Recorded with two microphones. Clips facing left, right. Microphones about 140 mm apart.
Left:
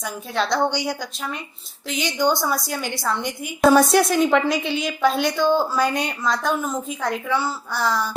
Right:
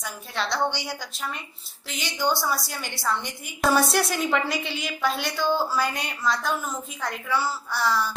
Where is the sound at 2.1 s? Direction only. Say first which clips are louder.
Left 4 dB; 50° left (ahead or behind).